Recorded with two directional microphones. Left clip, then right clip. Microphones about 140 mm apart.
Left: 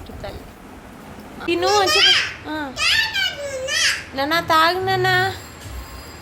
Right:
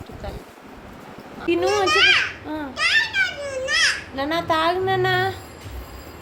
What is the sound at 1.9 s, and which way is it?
Speech, 15° right (ahead or behind).